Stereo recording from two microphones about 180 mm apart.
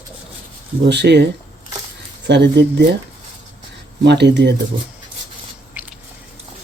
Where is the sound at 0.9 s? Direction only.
70° right (ahead or behind).